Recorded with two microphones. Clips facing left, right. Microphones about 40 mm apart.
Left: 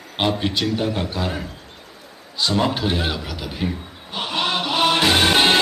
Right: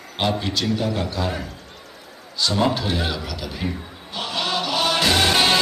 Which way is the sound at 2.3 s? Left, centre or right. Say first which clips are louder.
Even; centre.